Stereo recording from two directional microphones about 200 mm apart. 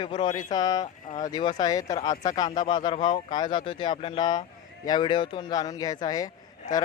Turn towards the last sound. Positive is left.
turn(degrees=35)  # may be behind; listen again after turning